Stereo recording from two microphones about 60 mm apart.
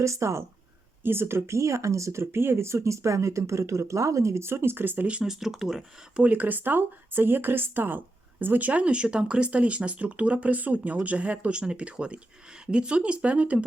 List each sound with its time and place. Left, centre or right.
0.0 s speech: right
1.0 s speech: right
5.0 s speech: centre
5.3 s speech: centre
6.1 s speech: right